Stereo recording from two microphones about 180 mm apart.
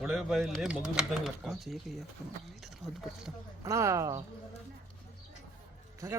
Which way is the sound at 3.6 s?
15° right (ahead or behind).